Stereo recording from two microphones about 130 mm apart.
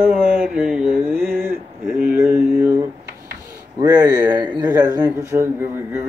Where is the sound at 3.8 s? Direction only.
30° right (ahead or behind).